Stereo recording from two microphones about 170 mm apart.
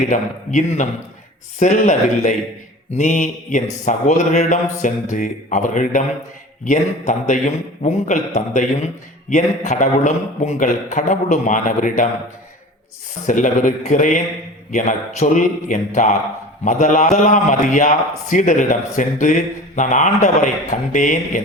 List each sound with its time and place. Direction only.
0.1 s a man's voice: 45° left (ahead or behind)
13.2 s a man's voice: 50° left (ahead or behind)